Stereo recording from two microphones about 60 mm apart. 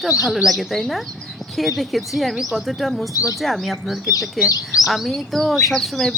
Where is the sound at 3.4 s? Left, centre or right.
Centre.